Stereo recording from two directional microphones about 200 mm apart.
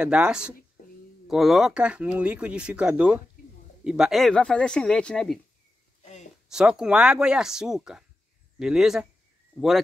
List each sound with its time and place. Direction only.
0.0 s speech: 5° right (ahead or behind)
0.8 s a sound: 45° left (ahead or behind)
1.2 s speech: centre (ahead or behind)
6.5 s speech: 5° right (ahead or behind)